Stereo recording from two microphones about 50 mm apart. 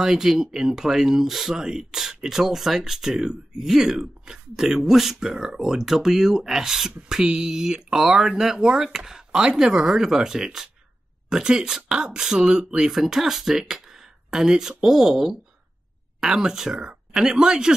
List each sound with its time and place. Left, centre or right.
0.0 s speech: centre